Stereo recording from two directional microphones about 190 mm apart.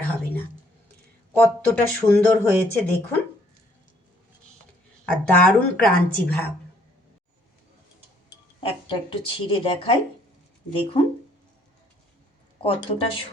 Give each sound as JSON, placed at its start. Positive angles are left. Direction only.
{"t": 1.4, "sound": "speech", "side_deg": 10}
{"t": 5.0, "sound": "speech", "side_deg": 5}
{"t": 8.6, "sound": "speech", "side_deg": 25}
{"t": 12.5, "sound": "speech", "side_deg": 30}